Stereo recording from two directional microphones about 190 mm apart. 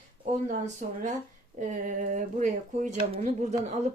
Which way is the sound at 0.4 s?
40° right (ahead or behind).